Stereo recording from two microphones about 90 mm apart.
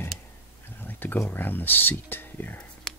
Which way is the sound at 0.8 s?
20° left (ahead or behind).